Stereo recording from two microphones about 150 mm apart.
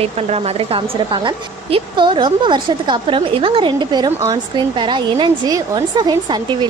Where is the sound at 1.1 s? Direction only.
30° right (ahead or behind).